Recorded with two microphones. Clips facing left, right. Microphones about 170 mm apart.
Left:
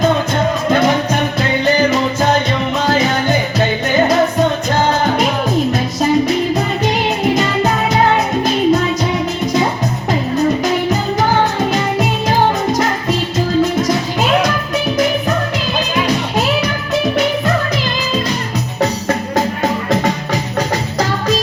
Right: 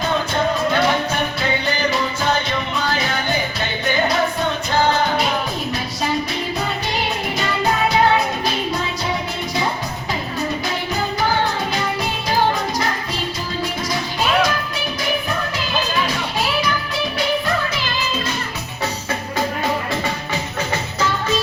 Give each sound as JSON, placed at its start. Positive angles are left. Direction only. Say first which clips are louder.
{"t": 2.7, "sound": "music", "louder": "left 9 dB", "side_deg": 40}
{"t": 5.7, "sound": "music", "louder": "left 8 dB", "side_deg": 45}
{"t": 16.0, "sound": "music", "louder": "left 7 dB", "side_deg": 45}
{"t": 19.6, "sound": "music", "louder": "left 6 dB", "side_deg": 40}